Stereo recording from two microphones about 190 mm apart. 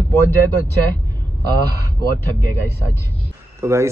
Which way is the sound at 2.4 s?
15° right (ahead or behind).